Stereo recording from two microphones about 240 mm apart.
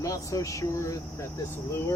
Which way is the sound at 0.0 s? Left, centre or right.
Centre.